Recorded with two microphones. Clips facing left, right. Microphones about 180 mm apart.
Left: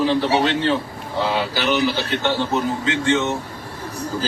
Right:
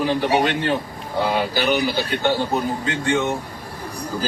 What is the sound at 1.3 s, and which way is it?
Speech, 45° right (ahead or behind).